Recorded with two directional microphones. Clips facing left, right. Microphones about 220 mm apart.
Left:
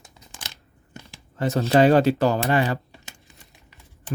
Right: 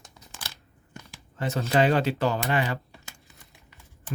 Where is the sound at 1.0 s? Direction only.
35° left (ahead or behind).